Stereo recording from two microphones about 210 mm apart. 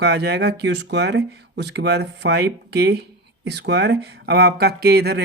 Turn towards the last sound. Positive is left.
turn(degrees=-50)  # may be behind; listen again after turning